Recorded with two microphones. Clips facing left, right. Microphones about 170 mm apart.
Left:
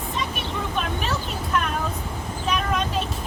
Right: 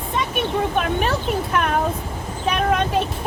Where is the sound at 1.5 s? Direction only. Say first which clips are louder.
Right 2 dB; 60° right (ahead or behind).